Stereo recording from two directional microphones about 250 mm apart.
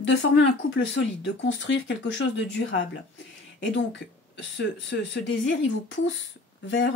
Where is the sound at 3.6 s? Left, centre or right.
Left.